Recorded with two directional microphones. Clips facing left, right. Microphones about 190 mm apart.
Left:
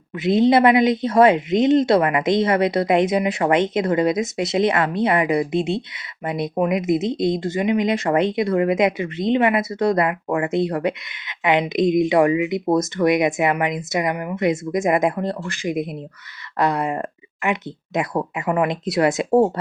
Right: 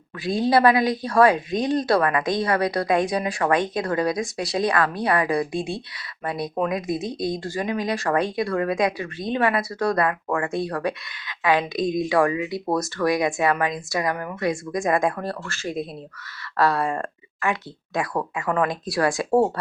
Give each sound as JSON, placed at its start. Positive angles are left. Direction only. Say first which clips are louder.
{"t": 0.2, "sound": "speech", "louder": "left 4 dB", "side_deg": 20}